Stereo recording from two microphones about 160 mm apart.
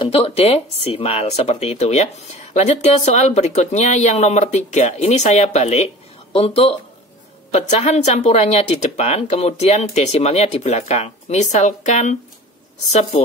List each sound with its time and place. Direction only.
0.0 s speech: 40° left (ahead or behind)